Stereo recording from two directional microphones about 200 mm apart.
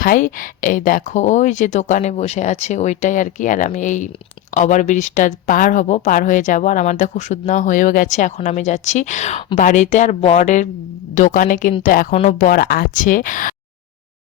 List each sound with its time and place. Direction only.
0.0 s speech: 45° left (ahead or behind)